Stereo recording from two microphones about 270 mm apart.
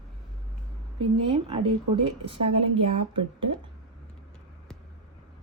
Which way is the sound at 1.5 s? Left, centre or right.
Centre.